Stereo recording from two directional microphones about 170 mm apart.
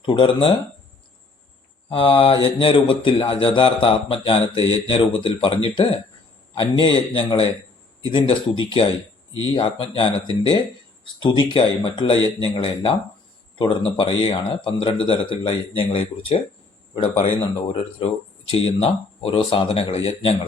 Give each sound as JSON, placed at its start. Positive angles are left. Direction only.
{"t": 0.0, "sound": "speech", "side_deg": 30}
{"t": 1.9, "sound": "speech", "side_deg": 30}
{"t": 11.2, "sound": "speech", "side_deg": 30}